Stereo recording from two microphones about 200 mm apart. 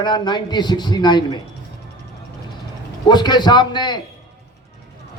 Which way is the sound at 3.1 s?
20° left (ahead or behind).